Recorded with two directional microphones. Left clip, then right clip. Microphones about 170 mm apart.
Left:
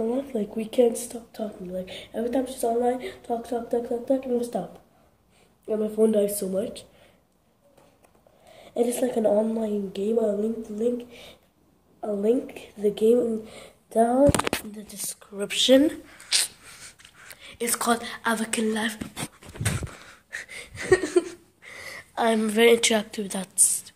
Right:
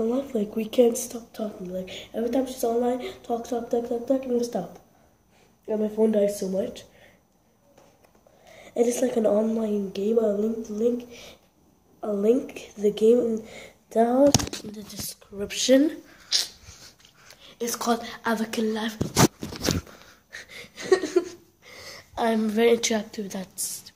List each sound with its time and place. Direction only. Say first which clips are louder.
0.0 s a woman's voice: right 1 dB; 15° right (ahead or behind); by 4.6 s centre (ahead or behind)
5.7 s speech: left 1 dB; 30° left (ahead or behind)
8.5 s a woman's voice: right 1 dB; 10° left (ahead or behind)
13.4 s speech: even; 15° left (ahead or behind)
15.0 s a sound: left 2 dB; centre (ahead or behind)
17.7 s a woman's voice: left 1 dB; centre (ahead or behind)
18.7 s speech: left 2 dB; 20° left (ahead or behind)
19.8 s gasp: left 4 dB; 5° left (ahead or behind)
20.3 s a sound: left 4 dB; centre (ahead or behind)
20.7 s a sound: left 1 dB; 20° left (ahead or behind)
22.1 s a woman's voice: left 2 dB; centre (ahead or behind)
23.5 s a woman's voice: left 8 dB; 30° left (ahead or behind)